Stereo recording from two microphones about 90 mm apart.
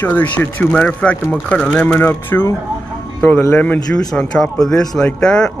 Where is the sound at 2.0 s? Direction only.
25° left (ahead or behind).